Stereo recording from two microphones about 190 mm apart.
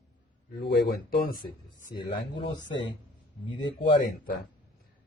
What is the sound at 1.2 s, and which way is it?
Speech, 50° left (ahead or behind).